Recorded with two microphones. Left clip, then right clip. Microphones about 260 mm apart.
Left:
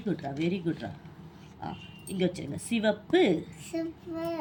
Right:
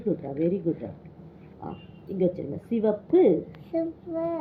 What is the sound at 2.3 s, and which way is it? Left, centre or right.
A woman's voice, left.